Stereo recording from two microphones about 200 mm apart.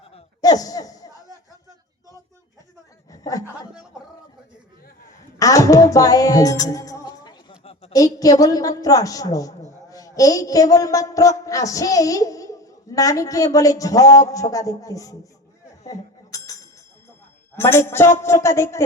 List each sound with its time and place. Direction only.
0.4 s speech: 20° left (ahead or behind)
3.1 s a sound: 15° left (ahead or behind)
5.4 s music: 15° left (ahead or behind)
7.9 s a woman's voice: 15° left (ahead or behind)
15.9 s a sound: 15° left (ahead or behind)
17.6 s a woman's voice: 10° left (ahead or behind)